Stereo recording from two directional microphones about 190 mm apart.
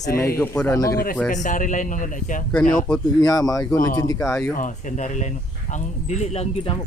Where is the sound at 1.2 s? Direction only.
40° left (ahead or behind).